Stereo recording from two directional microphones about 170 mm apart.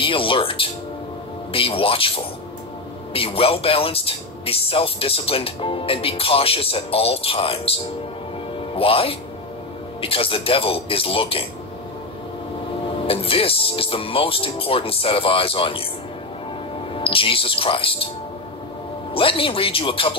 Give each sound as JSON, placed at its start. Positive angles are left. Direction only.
{"t": 0.0, "sound": "speech", "side_deg": 30}
{"t": 8.7, "sound": "speech", "side_deg": 35}
{"t": 13.0, "sound": "speech", "side_deg": 35}
{"t": 16.9, "sound": "speech", "side_deg": 30}
{"t": 19.1, "sound": "speech", "side_deg": 30}